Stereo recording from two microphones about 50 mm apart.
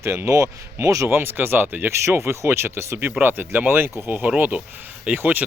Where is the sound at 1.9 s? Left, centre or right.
Right.